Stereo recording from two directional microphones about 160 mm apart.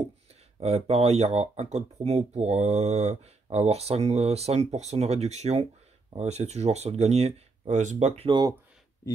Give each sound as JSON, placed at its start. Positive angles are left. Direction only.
{"t": 0.6, "sound": "speech", "side_deg": -40}
{"t": 8.3, "sound": "speech", "side_deg": -25}